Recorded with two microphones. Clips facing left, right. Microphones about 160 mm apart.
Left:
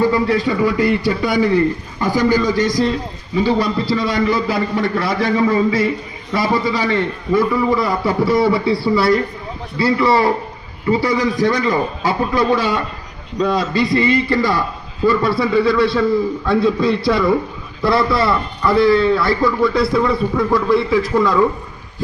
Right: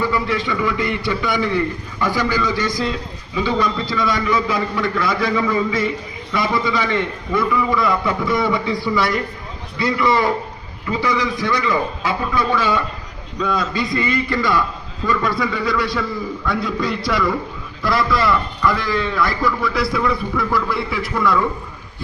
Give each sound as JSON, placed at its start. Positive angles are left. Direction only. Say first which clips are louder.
{"t": 0.0, "sound": "a man's voice", "louder": "left 5 dB", "side_deg": 40}